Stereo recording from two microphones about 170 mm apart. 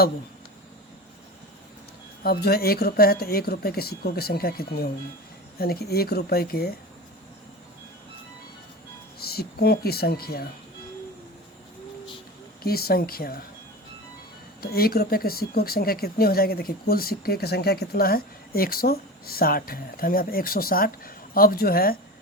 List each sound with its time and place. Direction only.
2.2 s speech: 65° left (ahead or behind)
9.1 s speech: 65° left (ahead or behind)
12.6 s speech: 65° left (ahead or behind)
14.6 s speech: 65° left (ahead or behind)